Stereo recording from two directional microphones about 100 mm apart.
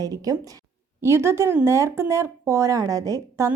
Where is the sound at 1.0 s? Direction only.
25° right (ahead or behind).